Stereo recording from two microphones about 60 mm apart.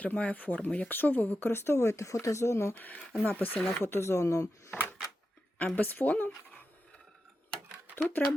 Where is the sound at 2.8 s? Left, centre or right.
Left.